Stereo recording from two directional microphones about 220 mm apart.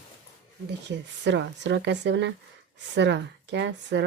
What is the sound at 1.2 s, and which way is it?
Speech, 55° right (ahead or behind).